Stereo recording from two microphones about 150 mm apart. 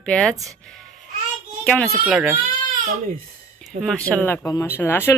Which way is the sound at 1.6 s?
10° left (ahead or behind).